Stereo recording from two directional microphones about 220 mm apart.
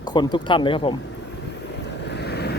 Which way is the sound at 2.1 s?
50° left (ahead or behind).